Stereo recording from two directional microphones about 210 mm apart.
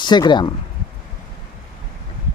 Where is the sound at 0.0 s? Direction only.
20° left (ahead or behind).